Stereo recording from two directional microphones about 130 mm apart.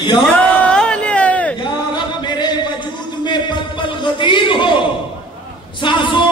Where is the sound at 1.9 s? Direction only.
35° left (ahead or behind).